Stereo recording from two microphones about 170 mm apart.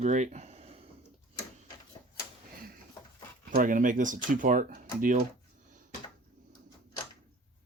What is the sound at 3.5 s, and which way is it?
Speech, 50° right (ahead or behind).